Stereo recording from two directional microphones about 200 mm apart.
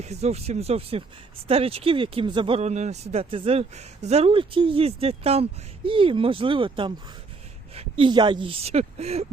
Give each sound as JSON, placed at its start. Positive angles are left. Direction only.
{"t": 0.0, "sound": "speech", "side_deg": -30}